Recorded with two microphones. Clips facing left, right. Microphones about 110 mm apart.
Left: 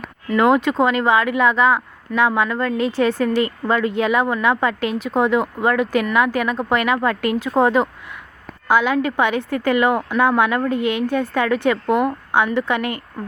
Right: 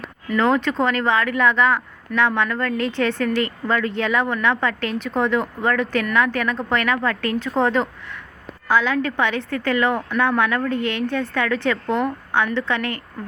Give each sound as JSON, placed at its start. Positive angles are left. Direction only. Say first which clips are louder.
{"t": 0.3, "sound": "a woman's voice", "louder": "left 3 dB", "side_deg": 15}
{"t": 3.2, "sound": "speech", "louder": "left 3 dB", "side_deg": 30}
{"t": 3.9, "sound": "a woman's voice", "louder": "left 3 dB", "side_deg": 10}
{"t": 6.9, "sound": "speech", "louder": "left 3 dB", "side_deg": 20}
{"t": 8.6, "sound": "a woman's voice", "louder": "left 2 dB", "side_deg": 15}
{"t": 10.8, "sound": "a woman's voice", "louder": "left 3 dB", "side_deg": 10}
{"t": 11.2, "sound": "a woman's voice", "louder": "left 3 dB", "side_deg": 25}